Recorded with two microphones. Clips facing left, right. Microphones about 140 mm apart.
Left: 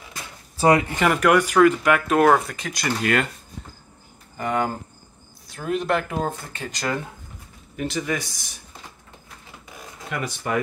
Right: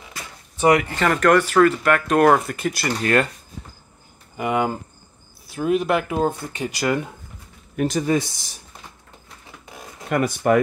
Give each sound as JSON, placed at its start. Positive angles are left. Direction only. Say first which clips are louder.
{"t": 0.6, "sound": "speech", "louder": "right 1 dB", "side_deg": 30}
{"t": 0.9, "sound": "speech", "louder": "right 1 dB", "side_deg": 10}
{"t": 4.4, "sound": "speech", "louder": "right 2 dB", "side_deg": -10}
{"t": 7.7, "sound": "speech", "louder": "right 6 dB", "side_deg": -45}
{"t": 8.1, "sound": "a man's voice", "louder": "right 7 dB", "side_deg": -25}
{"t": 10.0, "sound": "speech", "louder": "right 9 dB", "side_deg": -50}